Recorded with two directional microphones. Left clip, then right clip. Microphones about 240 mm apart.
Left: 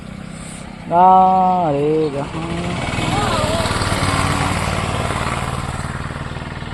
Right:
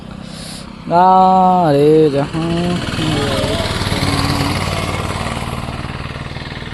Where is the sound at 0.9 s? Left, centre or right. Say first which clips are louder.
Right 1 dB; centre.